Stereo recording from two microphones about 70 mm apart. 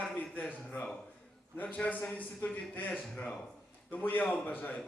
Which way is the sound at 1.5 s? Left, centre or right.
Left.